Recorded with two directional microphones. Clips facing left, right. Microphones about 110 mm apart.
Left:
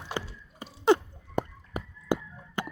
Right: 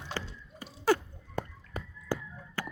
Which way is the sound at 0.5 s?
20° left (ahead or behind).